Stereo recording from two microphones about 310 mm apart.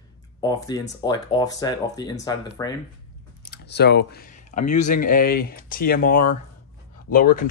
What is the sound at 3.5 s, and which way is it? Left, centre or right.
Speech, left.